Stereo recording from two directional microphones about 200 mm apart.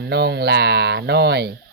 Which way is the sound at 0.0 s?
55° right (ahead or behind).